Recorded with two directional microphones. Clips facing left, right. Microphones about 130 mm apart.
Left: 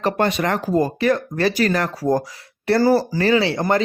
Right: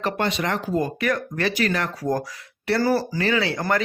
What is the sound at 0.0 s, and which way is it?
Speech, 50° left (ahead or behind).